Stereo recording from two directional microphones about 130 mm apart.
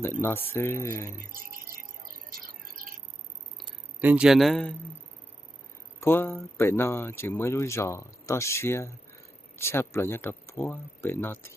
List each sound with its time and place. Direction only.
0.0 s speech: 15° left (ahead or behind)
1.2 s speech: 90° right
4.0 s a man's voice: 10° right (ahead or behind)
6.0 s speech: 20° left (ahead or behind)